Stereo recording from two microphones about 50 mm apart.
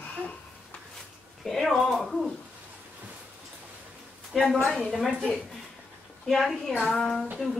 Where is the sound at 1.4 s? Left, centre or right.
Centre.